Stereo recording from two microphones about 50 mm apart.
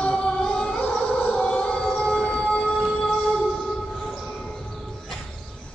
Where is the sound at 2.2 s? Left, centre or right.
Centre.